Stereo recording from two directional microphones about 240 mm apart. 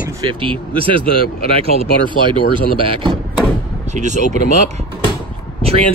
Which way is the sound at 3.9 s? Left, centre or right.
Right.